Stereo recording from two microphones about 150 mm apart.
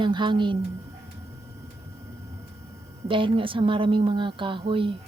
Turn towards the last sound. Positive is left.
turn(degrees=-35)  # may be behind; listen again after turning